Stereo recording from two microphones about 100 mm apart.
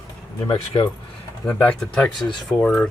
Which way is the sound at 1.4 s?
15° left (ahead or behind).